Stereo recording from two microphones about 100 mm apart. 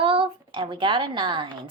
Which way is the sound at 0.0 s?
60° right (ahead or behind).